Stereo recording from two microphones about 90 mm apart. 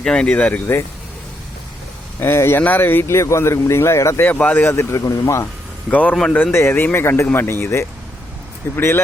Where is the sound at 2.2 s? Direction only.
25° left (ahead or behind).